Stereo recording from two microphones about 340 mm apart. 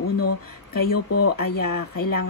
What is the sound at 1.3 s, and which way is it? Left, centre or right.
Speech, left.